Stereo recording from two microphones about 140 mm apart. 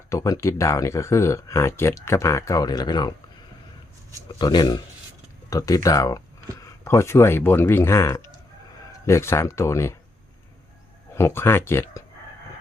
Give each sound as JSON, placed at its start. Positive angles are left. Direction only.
{"t": 0.1, "sound": "speech", "side_deg": 20}
{"t": 4.3, "sound": "speech", "side_deg": 30}
{"t": 11.1, "sound": "speech", "side_deg": 20}